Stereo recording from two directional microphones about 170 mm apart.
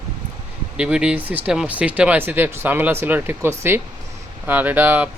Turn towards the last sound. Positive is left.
turn(degrees=-10)  # may be behind; listen again after turning